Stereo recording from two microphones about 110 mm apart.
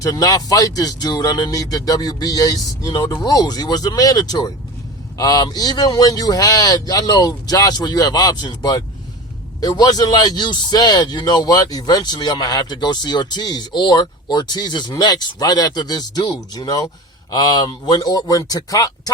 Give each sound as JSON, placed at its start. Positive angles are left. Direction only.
{"t": 0.0, "sound": "speech", "side_deg": 30}